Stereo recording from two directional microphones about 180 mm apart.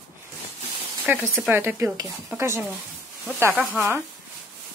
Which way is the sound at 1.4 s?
10° right (ahead or behind).